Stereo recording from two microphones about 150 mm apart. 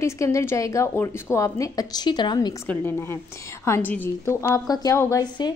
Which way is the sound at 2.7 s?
15° left (ahead or behind).